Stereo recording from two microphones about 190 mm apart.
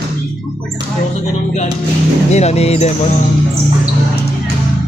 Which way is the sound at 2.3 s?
35° left (ahead or behind).